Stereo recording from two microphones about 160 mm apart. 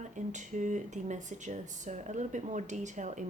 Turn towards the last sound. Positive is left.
turn(degrees=-50)  # may be behind; listen again after turning